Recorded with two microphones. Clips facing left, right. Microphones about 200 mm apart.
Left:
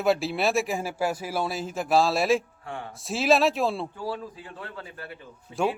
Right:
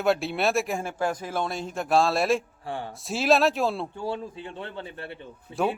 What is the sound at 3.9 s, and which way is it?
A man's voice, 25° right (ahead or behind).